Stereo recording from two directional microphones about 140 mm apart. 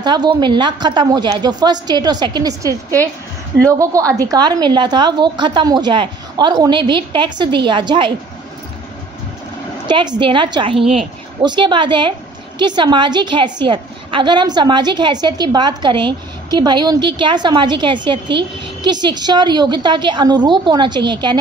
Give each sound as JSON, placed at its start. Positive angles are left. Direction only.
{"t": 0.0, "sound": "a woman's voice", "side_deg": -35}
{"t": 9.8, "sound": "a woman's voice", "side_deg": -35}